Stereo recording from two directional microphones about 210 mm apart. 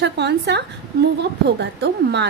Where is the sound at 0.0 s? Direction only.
55° right (ahead or behind).